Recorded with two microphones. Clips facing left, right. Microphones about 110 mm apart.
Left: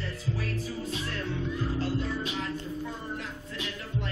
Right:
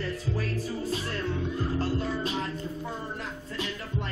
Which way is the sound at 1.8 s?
40° right (ahead or behind).